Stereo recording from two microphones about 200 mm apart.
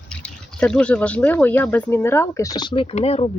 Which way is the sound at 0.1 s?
5° left (ahead or behind).